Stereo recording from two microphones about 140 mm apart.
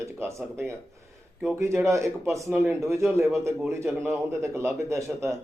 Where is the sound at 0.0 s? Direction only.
20° right (ahead or behind).